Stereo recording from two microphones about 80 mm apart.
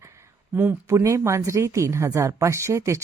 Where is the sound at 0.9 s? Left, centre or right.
Right.